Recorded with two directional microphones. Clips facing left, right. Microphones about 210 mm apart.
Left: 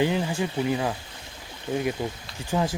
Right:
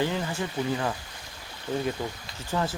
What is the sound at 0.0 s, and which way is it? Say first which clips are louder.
Speech: left 4 dB; 15° left (ahead or behind).